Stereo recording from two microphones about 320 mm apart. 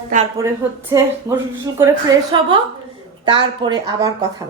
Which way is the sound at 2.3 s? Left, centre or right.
Centre.